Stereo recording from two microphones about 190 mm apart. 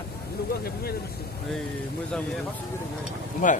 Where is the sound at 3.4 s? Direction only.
45° left (ahead or behind).